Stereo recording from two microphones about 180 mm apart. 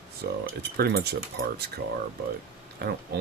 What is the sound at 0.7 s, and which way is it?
Speech, 65° right (ahead or behind).